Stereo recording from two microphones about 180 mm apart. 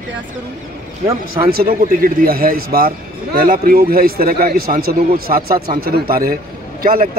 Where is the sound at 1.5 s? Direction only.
55° right (ahead or behind).